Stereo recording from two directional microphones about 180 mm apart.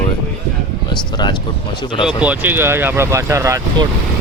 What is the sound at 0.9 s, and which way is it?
Speech, 25° left (ahead or behind).